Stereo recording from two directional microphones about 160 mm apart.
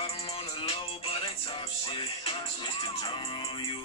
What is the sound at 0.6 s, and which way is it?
Music, 35° left (ahead or behind).